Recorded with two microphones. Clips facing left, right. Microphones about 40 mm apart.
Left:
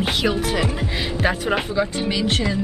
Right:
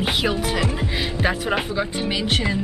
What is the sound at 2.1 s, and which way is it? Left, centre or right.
Music, centre.